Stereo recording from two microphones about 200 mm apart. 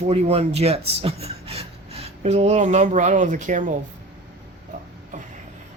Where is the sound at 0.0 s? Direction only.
30° right (ahead or behind).